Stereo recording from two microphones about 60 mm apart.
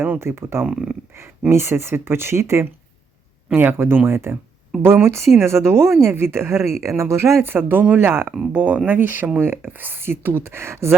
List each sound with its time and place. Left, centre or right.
0.2 s speech: right
0.6 s speech: centre
1.5 s speech: right
3.5 s speech: right
7.4 s speech: right
8.5 s speech: right